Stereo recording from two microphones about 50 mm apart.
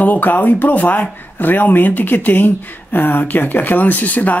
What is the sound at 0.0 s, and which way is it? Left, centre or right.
Speech, left.